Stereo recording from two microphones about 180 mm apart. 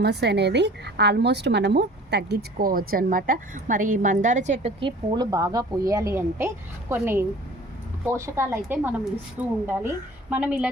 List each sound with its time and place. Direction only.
0.0 s a woman's voice: 70° right (ahead or behind); by 4.7 s 40° right (ahead or behind)
4.8 s a woman's voice: 25° right (ahead or behind); by 10.7 s 5° right (ahead or behind)